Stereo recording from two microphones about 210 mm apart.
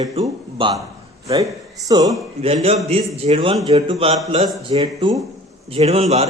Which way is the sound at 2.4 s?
30° right (ahead or behind).